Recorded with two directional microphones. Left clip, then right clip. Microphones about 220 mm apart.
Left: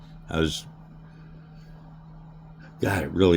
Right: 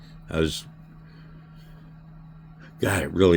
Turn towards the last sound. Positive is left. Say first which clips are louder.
# right 1 dB
turn(degrees=-10)  # may be behind; listen again after turning